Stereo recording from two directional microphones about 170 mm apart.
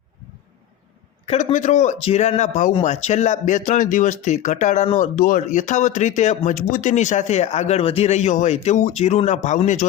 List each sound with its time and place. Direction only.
1.3 s a man's voice: 35° left (ahead or behind)